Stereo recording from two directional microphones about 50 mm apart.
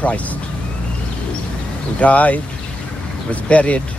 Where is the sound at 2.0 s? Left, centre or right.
Left.